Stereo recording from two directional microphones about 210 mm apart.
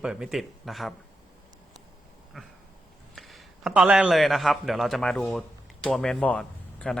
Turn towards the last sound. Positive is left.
turn(degrees=5)  # may be behind; listen again after turning